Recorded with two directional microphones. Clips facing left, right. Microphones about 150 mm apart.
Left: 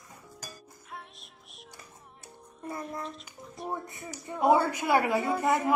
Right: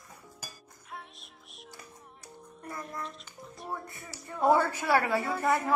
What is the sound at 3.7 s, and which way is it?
A woman's voice, 20° left (ahead or behind).